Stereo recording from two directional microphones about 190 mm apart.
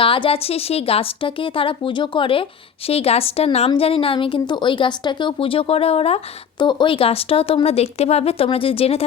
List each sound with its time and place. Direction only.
0.0 s a woman's voice: 25° left (ahead or behind)